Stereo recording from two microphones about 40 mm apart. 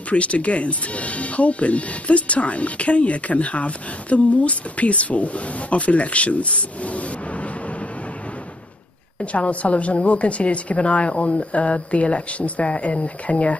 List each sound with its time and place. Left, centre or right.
0.1 s speech: left
9.2 s speech: left